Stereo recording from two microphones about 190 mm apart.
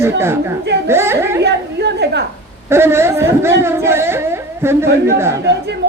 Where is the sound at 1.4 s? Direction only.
60° right (ahead or behind).